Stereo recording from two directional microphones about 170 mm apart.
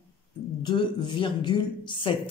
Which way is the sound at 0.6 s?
25° left (ahead or behind).